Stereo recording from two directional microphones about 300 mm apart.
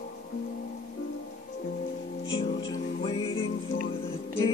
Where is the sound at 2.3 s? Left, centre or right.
Centre.